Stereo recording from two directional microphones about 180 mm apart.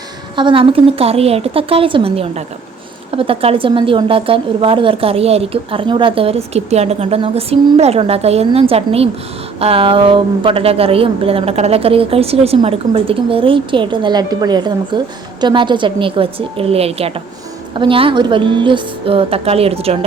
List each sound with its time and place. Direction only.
0.3 s a woman's voice: 30° right (ahead or behind)